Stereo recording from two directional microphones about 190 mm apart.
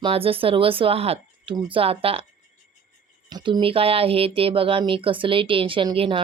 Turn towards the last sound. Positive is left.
turn(degrees=-25)  # may be behind; listen again after turning